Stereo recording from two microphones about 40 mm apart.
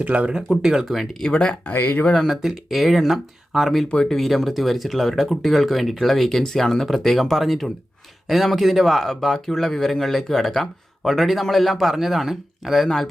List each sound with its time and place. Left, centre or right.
0.0 s speech: right
0.6 s speech: centre
1.2 s speech: left
1.7 s speech: left
2.2 s speech: centre
4.0 s speech: centre